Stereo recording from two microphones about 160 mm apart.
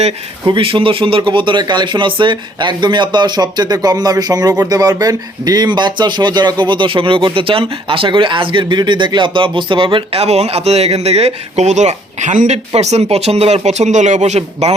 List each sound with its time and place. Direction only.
0.4 s speech: 35° right (ahead or behind)